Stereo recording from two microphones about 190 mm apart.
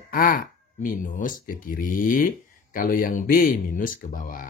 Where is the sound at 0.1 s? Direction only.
50° left (ahead or behind).